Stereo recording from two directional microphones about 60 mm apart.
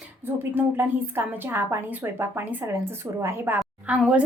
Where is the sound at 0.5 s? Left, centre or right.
Right.